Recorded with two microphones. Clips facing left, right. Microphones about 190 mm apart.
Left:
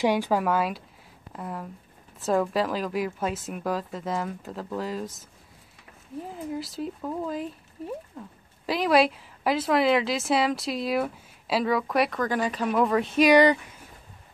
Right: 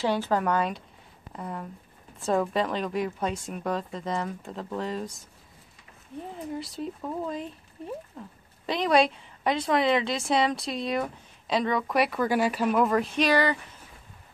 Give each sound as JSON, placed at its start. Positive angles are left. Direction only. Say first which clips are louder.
{"t": 0.0, "sound": "a woman's voice", "louder": "left 2 dB", "side_deg": 15}
{"t": 6.2, "sound": "a woman's voice", "louder": "left 1 dB", "side_deg": 5}
{"t": 13.3, "sound": "speech", "louder": "left 7 dB", "side_deg": 15}